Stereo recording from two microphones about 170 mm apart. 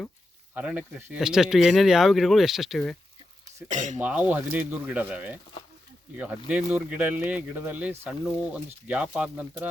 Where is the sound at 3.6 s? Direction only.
45° right (ahead or behind).